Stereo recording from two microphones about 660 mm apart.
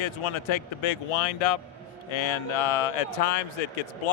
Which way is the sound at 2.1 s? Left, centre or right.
Left.